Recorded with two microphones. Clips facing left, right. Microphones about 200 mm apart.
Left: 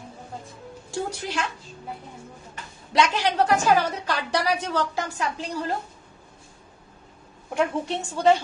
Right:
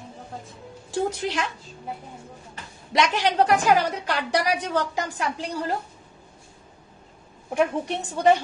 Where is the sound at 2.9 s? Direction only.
15° right (ahead or behind).